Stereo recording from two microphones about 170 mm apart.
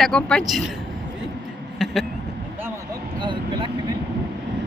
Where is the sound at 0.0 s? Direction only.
5° left (ahead or behind).